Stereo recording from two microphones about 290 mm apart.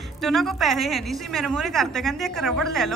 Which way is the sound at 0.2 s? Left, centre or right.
Centre.